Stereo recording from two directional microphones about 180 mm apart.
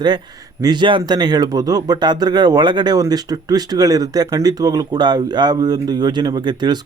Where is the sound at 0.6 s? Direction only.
25° right (ahead or behind).